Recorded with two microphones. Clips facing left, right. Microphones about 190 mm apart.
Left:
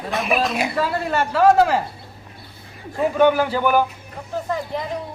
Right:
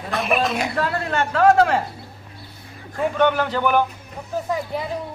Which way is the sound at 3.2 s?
10° left (ahead or behind).